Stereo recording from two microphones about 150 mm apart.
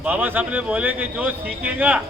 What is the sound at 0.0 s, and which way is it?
Speech, 10° right (ahead or behind).